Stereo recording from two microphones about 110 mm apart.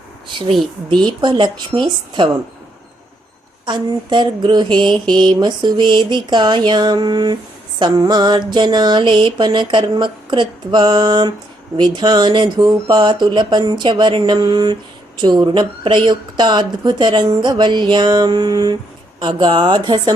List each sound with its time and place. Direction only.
0.9 s speech: 45° right (ahead or behind)
3.7 s speech: 45° right (ahead or behind)
6.7 s mantra: 40° right (ahead or behind)
7.8 s speech: 40° right (ahead or behind)